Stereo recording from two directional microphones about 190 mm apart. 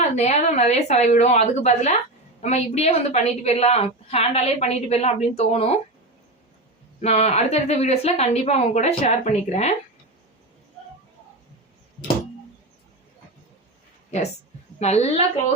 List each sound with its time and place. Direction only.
0.0 s a woman's voice: 35° left (ahead or behind)
7.0 s a woman's voice: 35° left (ahead or behind)
14.8 s a woman's voice: 35° left (ahead or behind)